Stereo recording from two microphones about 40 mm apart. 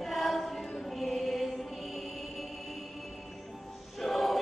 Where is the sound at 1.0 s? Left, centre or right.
Centre.